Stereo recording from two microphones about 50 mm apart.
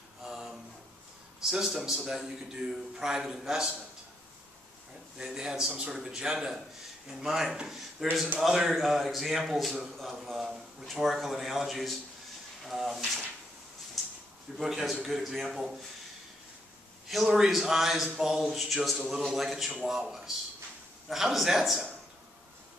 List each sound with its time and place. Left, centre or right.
0.2 s a sound: centre
1.4 s a man's voice: centre
5.1 s a man's voice: centre
14.0 s a sound: centre
14.6 s a man's voice: centre
17.3 s a man's voice: centre
21.1 s a man's voice: centre